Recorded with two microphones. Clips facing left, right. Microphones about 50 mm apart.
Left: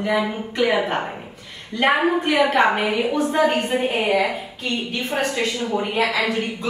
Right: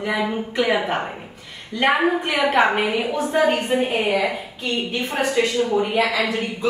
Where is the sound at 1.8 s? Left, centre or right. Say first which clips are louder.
Even; centre.